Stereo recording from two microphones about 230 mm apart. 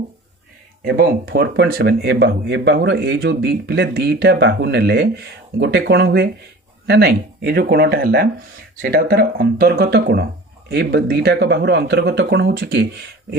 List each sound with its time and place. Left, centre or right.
0.9 s speech: right